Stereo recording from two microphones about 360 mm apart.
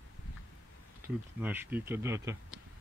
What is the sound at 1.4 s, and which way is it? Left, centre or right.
Speech, centre.